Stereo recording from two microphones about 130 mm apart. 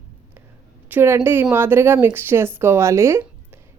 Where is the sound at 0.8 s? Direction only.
15° right (ahead or behind).